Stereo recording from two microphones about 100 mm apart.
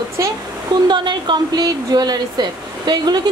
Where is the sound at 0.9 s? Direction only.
50° right (ahead or behind).